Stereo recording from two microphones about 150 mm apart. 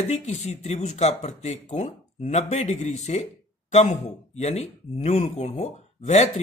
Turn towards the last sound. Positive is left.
turn(degrees=50)  # may be behind; listen again after turning